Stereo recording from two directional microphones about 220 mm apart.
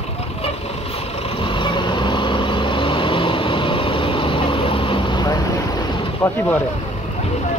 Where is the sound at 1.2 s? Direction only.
25° left (ahead or behind).